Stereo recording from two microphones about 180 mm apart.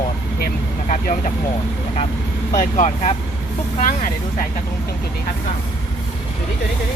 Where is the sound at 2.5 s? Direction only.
45° left (ahead or behind).